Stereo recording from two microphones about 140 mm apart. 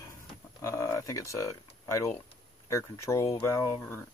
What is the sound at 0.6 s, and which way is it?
Speech, 20° left (ahead or behind).